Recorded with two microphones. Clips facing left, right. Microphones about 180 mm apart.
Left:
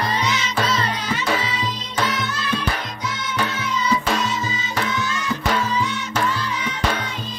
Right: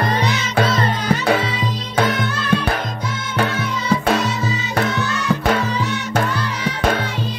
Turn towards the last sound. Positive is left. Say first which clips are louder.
# right 3 dB
turn(degrees=-60)  # may be behind; listen again after turning